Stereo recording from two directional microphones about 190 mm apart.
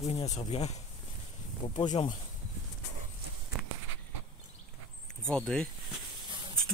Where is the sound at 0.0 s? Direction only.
35° left (ahead or behind).